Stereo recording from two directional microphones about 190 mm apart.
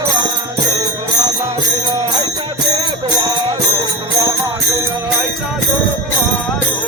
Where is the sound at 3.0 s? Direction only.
20° right (ahead or behind).